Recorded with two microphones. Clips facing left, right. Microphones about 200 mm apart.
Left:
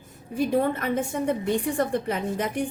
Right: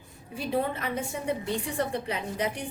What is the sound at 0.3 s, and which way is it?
A woman's voice, 50° left (ahead or behind).